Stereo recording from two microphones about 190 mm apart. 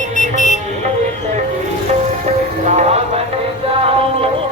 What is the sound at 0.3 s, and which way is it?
Vehicle, 40° left (ahead or behind).